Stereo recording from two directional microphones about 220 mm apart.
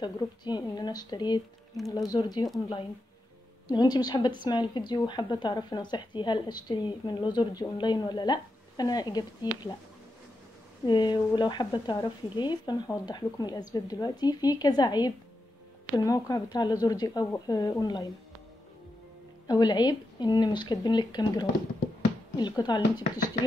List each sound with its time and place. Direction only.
0.0 s speech: 20° left (ahead or behind)
3.6 s speech: 20° left (ahead or behind)
10.9 s speech: 20° left (ahead or behind)
19.4 s speech: 20° left (ahead or behind)